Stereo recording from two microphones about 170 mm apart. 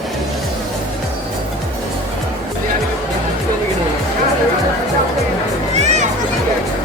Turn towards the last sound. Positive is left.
turn(degrees=-40)  # may be behind; listen again after turning